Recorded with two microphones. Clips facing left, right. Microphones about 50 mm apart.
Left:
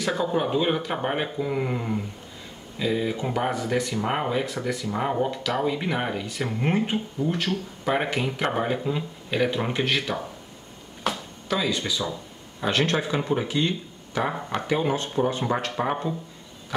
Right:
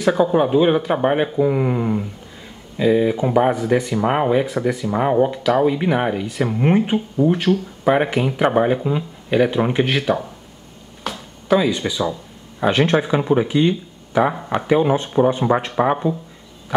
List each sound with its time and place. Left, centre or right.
0.2 s speech: centre
11.1 s a sound: centre
11.4 s speech: centre